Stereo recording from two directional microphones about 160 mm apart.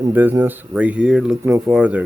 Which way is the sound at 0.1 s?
10° right (ahead or behind).